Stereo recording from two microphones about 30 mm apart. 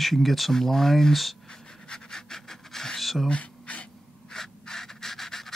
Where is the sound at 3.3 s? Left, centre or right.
Left.